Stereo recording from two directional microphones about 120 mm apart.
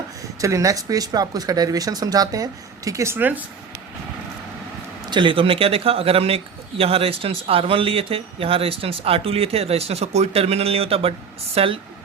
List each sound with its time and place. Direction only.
0.2 s speech: 25° right (ahead or behind)
5.1 s speech: 45° right (ahead or behind)